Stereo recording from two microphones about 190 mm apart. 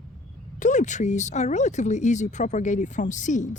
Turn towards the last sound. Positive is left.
turn(degrees=40)  # may be behind; listen again after turning